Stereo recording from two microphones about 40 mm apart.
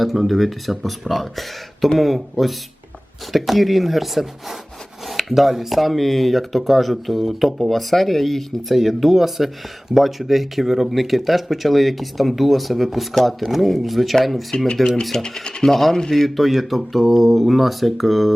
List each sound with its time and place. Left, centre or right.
0.0 s speech: centre
15.2 s speech: left
15.6 s speech: centre
16.2 s speech: centre